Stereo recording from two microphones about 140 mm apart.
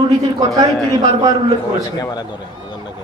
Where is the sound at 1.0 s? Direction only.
30° right (ahead or behind).